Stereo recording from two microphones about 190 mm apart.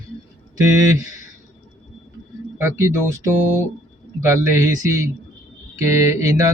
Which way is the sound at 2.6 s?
15° right (ahead or behind).